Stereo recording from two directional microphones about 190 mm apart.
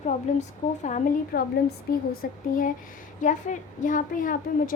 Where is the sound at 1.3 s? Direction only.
50° left (ahead or behind).